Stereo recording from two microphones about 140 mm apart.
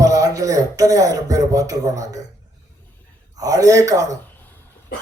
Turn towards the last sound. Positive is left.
turn(degrees=-25)  # may be behind; listen again after turning